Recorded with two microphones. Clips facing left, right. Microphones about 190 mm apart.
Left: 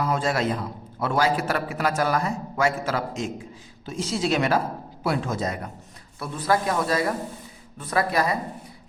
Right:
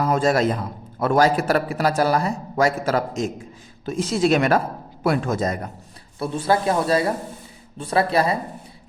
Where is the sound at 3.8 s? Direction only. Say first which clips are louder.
Right 6 dB; 55° right (ahead or behind).